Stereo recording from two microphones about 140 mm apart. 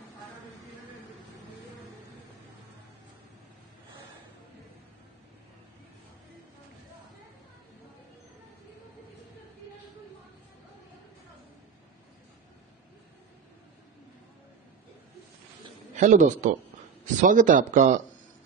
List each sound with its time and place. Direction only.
16.0 s a man's voice: 65° right (ahead or behind)